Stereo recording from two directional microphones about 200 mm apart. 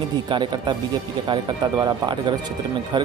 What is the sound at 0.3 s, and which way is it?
Speech, 20° right (ahead or behind).